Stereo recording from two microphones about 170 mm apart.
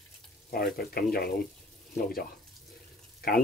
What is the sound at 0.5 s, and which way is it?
Speech, 65° left (ahead or behind).